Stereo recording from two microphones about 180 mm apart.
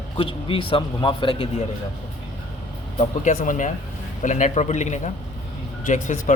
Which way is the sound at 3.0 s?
45° left (ahead or behind).